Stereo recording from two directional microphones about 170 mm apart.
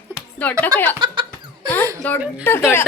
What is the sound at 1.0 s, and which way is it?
Laughter, 30° right (ahead or behind).